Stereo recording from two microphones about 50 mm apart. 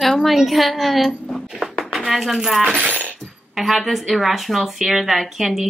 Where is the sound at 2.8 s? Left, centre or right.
Right.